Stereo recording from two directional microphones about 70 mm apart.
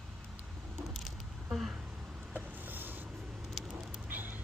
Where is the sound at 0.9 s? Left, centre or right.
Centre.